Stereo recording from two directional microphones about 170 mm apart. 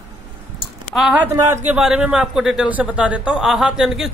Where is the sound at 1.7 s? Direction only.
5° right (ahead or behind).